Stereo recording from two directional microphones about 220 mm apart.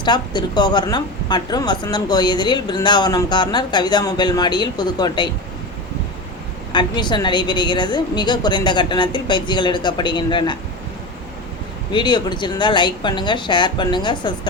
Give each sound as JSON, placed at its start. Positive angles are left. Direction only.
{"t": 0.0, "sound": "speech", "side_deg": 20}
{"t": 6.7, "sound": "speech", "side_deg": 20}
{"t": 11.9, "sound": "speech", "side_deg": 20}